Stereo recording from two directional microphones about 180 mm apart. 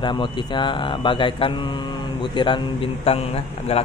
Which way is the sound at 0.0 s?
25° left (ahead or behind).